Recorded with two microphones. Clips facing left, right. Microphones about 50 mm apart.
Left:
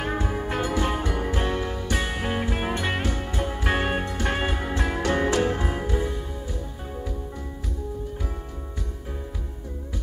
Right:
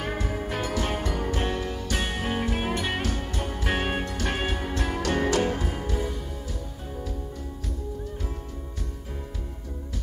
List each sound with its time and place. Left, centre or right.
0.0 s music: left